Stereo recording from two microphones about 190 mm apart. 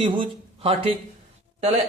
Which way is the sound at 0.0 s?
25° right (ahead or behind).